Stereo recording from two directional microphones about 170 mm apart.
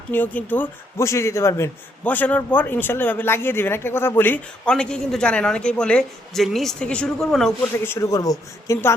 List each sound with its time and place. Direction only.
0.1 s speech: 10° left (ahead or behind)
7.9 s speech: 20° left (ahead or behind)